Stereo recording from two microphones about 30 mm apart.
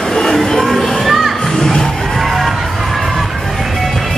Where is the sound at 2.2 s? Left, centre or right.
Centre.